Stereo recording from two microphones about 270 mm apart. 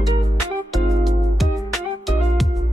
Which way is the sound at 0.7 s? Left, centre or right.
Centre.